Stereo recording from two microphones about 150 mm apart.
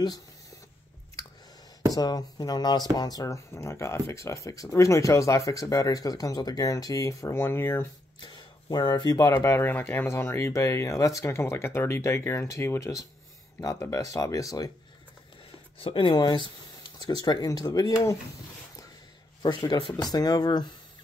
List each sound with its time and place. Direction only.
2.0 s speech: 25° left (ahead or behind)
8.2 s speech: 30° left (ahead or behind)
15.8 s speech: 35° left (ahead or behind)
19.9 s speech: 25° left (ahead or behind)